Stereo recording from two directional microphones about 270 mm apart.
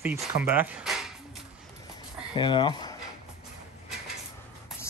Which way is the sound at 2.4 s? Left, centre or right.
Centre.